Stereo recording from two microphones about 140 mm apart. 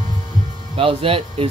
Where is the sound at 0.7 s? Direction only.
40° right (ahead or behind).